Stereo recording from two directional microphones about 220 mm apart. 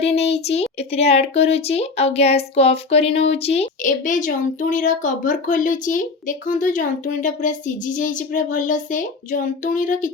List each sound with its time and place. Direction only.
0.0 s speech: 30° left (ahead or behind)